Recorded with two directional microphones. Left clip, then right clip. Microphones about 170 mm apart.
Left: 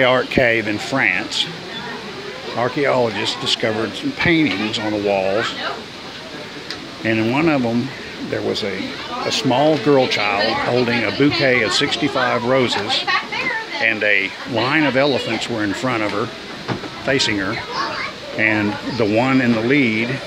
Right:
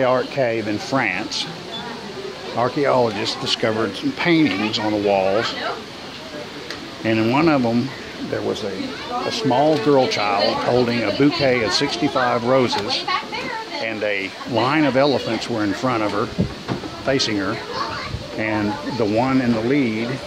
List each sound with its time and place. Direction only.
0.0 s speech: 10° left (ahead or behind)
2.6 s speech: 5° left (ahead or behind)
7.1 s speech: centre (ahead or behind)
9.3 s speech: 15° left (ahead or behind); by 13.0 s centre (ahead or behind)
13.8 s speech: 10° left (ahead or behind)